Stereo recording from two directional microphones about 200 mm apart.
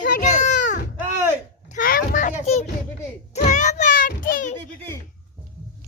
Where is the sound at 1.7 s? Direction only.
45° left (ahead or behind).